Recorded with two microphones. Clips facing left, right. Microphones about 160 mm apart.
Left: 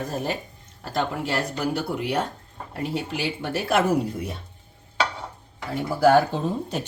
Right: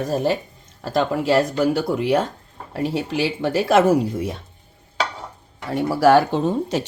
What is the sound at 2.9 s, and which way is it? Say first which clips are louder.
Speech: right 4 dB; 90° right.